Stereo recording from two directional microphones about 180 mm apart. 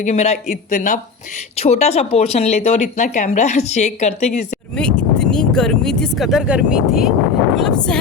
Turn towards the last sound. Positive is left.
turn(degrees=0)  # may be behind; listen again after turning